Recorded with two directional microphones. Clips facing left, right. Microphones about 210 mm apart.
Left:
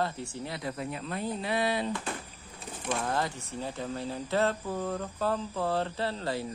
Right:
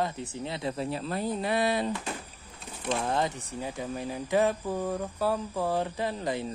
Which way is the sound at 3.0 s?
20° right (ahead or behind).